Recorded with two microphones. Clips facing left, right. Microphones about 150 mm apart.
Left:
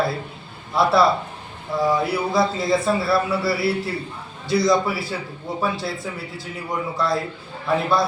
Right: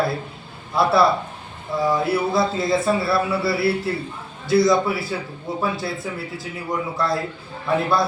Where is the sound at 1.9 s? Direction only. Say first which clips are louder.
Right 2 dB; centre (ahead or behind).